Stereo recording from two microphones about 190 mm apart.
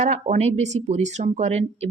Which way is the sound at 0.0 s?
35° right (ahead or behind).